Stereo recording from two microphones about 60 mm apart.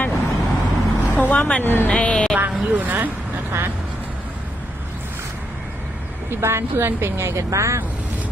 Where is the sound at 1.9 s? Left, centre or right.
Centre.